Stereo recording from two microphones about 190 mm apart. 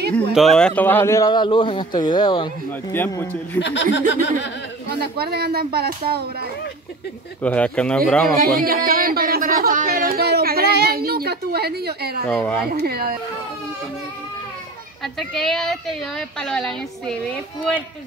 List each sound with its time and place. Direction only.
0.1 s speech: centre (ahead or behind); by 2.5 s 25° left (ahead or behind)
2.9 s speech: 10° left (ahead or behind)
3.5 s speech: 70° left (ahead or behind)
5.1 s speech: 55° right (ahead or behind)
7.4 s speech: 5° left (ahead or behind)
8.5 s speech: 50° right (ahead or behind)
12.3 s speech: 5° left (ahead or behind)
12.7 s speech: 55° right (ahead or behind)
15.1 s speech: centre (ahead or behind)